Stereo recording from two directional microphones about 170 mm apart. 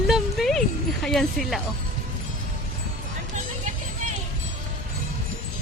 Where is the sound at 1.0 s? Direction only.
Centre (ahead or behind).